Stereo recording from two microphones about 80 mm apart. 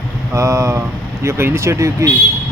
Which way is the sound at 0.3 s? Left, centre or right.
Right.